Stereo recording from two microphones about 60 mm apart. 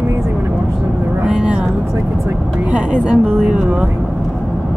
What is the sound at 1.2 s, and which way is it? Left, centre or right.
Speech, centre.